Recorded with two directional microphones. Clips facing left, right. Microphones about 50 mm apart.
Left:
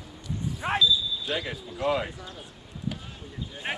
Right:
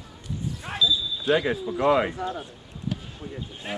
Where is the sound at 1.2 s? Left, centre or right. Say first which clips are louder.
Right 9 dB; right.